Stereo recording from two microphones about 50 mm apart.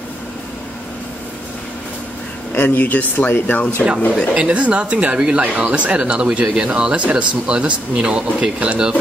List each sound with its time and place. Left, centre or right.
2.5 s speech: left
4.4 s speech: right